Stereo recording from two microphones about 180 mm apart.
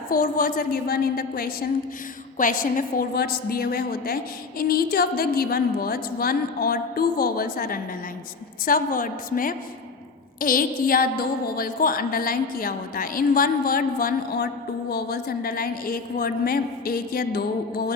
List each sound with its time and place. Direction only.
0.1 s a woman's voice: 50° left (ahead or behind)